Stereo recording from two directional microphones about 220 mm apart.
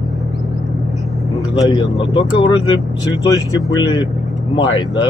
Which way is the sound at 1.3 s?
20° left (ahead or behind).